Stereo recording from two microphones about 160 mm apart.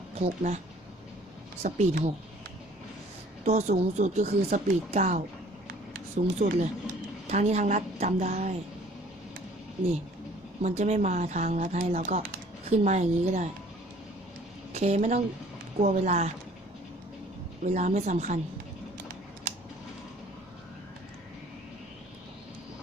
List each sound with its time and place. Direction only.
0.2 s speech: 45° right (ahead or behind)
1.6 s speech: 50° right (ahead or behind)
3.4 s speech: 45° right (ahead or behind)
10.6 s speech: 45° right (ahead or behind)
14.7 s speech: 40° right (ahead or behind)
17.6 s speech: 50° right (ahead or behind)